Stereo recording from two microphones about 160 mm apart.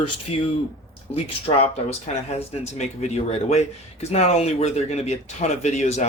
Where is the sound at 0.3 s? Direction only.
40° left (ahead or behind).